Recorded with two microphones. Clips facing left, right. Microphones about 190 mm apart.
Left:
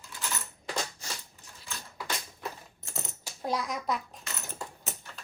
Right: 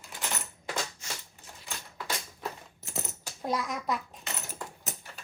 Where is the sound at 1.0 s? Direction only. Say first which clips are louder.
Even; 35° left (ahead or behind).